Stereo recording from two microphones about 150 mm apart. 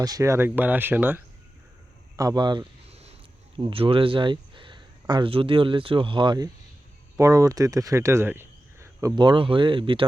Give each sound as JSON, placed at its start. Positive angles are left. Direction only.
{"t": 0.0, "sound": "speech", "side_deg": -25}
{"t": 2.1, "sound": "speech", "side_deg": -25}
{"t": 2.9, "sound": "a sound", "side_deg": -45}
{"t": 3.6, "sound": "speech", "side_deg": -35}
{"t": 9.1, "sound": "speech", "side_deg": -30}